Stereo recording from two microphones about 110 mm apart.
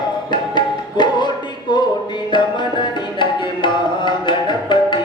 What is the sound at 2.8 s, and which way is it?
Tabla, 45° left (ahead or behind).